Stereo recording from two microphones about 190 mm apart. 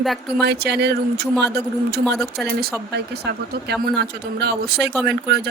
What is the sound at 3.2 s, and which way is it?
Speech, 60° right (ahead or behind).